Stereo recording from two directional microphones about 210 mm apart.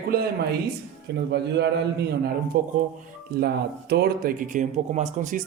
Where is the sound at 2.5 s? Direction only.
40° right (ahead or behind).